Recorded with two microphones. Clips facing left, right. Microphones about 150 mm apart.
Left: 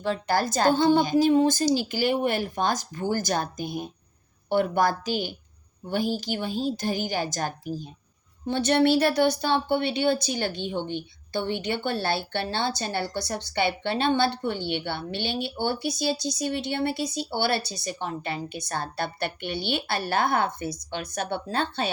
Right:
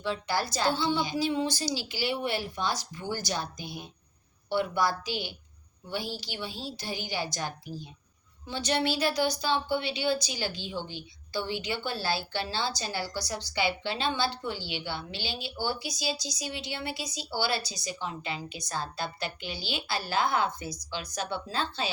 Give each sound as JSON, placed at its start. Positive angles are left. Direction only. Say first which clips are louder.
{"t": 0.0, "sound": "a woman's voice", "louder": "left 5 dB", "side_deg": 45}